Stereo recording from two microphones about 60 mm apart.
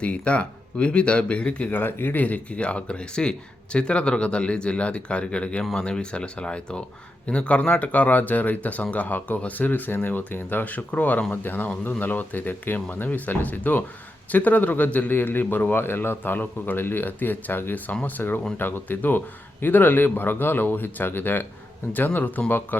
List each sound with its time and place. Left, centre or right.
0.0 s speech: centre
1.8 s a man's voice: left
2.2 s a man's voice: left